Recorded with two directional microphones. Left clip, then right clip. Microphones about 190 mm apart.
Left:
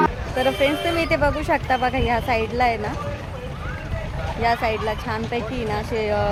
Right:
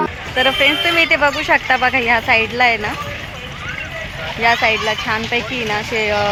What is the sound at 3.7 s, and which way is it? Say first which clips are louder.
Vehicle: right 7 dB; 60° left (ahead or behind).